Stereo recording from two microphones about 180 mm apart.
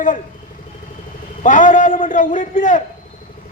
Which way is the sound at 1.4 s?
45° left (ahead or behind).